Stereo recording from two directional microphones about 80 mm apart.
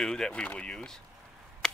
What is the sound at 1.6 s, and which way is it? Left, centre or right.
Chop, centre.